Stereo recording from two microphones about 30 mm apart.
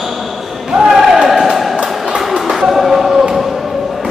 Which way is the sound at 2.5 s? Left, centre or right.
Centre.